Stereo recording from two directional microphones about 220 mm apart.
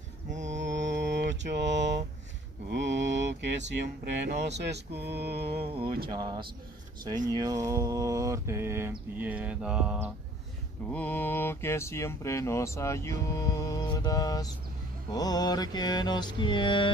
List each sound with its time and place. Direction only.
0.5 s mantra: 55° right (ahead or behind)
4.6 s a sound: 50° right (ahead or behind)
5.5 s speech: 25° right (ahead or behind)
7.2 s mantra: 15° right (ahead or behind)
10.9 s speech: 5° left (ahead or behind)
15.1 s music: 15° left (ahead or behind)